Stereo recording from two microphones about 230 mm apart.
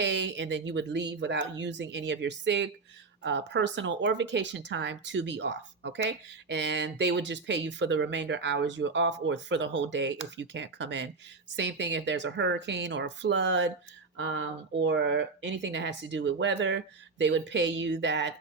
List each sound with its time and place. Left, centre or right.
0.0 s speech: right